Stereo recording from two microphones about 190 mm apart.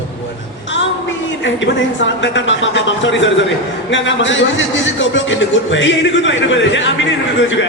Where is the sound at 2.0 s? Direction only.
75° left (ahead or behind).